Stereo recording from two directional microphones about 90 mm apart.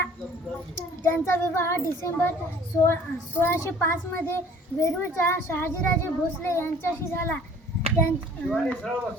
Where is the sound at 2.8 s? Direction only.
25° left (ahead or behind).